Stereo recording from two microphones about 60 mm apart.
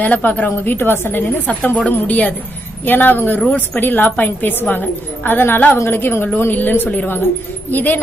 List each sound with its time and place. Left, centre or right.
0.0 s a woman's voice: left
1.5 s a woman's voice: left
5.7 s a woman's voice: left